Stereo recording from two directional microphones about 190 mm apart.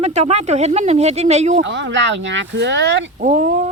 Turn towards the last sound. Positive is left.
turn(degrees=-40)  # may be behind; listen again after turning